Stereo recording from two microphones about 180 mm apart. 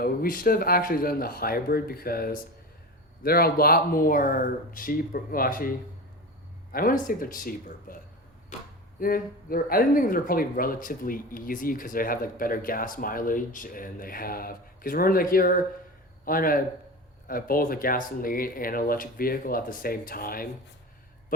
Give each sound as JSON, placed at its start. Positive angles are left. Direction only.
{"t": 0.0, "sound": "speech", "side_deg": 55}
{"t": 6.7, "sound": "speech", "side_deg": 50}
{"t": 9.0, "sound": "a man's voice", "side_deg": 55}